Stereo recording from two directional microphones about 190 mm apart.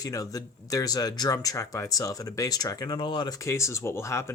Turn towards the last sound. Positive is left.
turn(degrees=15)  # may be behind; listen again after turning